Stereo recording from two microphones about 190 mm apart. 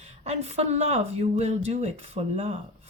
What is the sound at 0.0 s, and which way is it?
A woman's voice, 35° right (ahead or behind).